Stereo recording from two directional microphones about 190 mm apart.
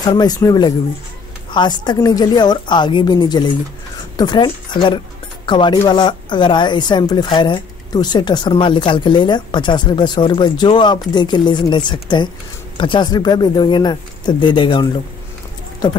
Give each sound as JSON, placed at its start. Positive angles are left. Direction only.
{"t": 0.0, "sound": "speech", "side_deg": 20}